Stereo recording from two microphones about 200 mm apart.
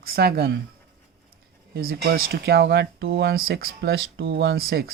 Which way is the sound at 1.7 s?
50° right (ahead or behind).